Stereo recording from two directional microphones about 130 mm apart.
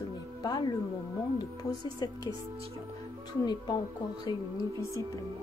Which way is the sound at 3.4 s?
35° left (ahead or behind).